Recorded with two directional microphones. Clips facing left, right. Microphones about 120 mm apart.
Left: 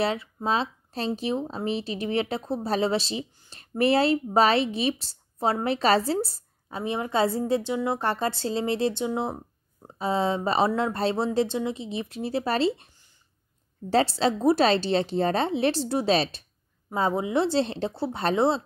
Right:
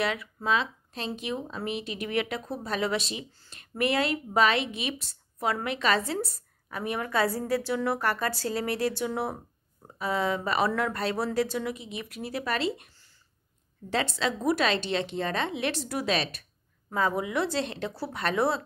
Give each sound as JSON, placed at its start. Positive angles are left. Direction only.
{"t": 0.0, "sound": "a woman's voice", "side_deg": 30}
{"t": 12.9, "sound": "a sound", "side_deg": 15}
{"t": 13.8, "sound": "a woman's voice", "side_deg": 35}